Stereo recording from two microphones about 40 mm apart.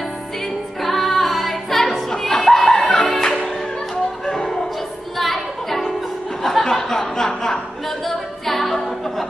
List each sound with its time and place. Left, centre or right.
0.8 s music: centre
5.1 s a sound: centre
7.2 s a capella: centre